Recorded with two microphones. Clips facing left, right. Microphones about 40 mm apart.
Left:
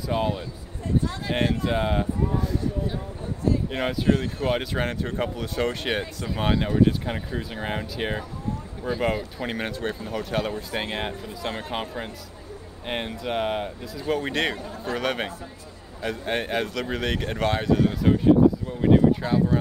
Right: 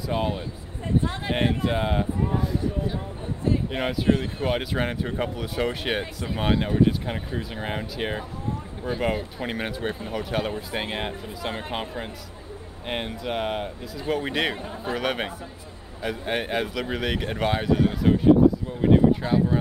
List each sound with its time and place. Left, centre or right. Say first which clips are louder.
0.1 s speech: left 1 dB; centre
1.3 s speech: even; centre
1.7 s speech: left 1 dB; centre
2.2 s speech: even; centre
3.7 s speech: right 1 dB; centre